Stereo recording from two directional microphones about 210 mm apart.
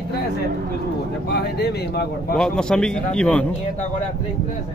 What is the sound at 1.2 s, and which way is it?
Speech, 50° left (ahead or behind).